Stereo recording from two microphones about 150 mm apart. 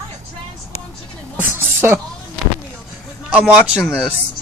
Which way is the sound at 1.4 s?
15° right (ahead or behind).